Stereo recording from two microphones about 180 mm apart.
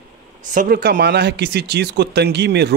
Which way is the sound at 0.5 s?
60° right (ahead or behind).